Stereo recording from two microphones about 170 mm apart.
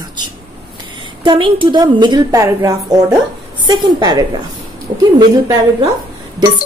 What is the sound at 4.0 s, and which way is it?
A woman's voice, 25° right (ahead or behind).